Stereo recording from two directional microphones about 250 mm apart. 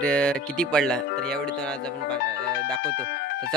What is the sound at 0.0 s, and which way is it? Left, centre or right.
Speech, centre.